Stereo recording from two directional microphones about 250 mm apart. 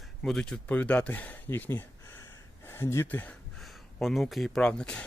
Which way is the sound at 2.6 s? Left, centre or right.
Centre.